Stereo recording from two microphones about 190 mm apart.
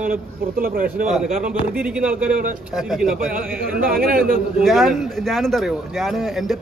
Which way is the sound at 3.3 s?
50° right (ahead or behind).